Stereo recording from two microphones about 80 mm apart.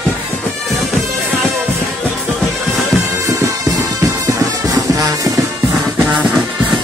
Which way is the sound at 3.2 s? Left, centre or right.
Right.